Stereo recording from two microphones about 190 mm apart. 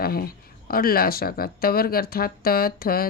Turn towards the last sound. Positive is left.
turn(degrees=50)  # may be behind; listen again after turning